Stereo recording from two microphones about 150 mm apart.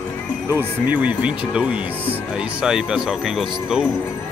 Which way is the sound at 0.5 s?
10° right (ahead or behind).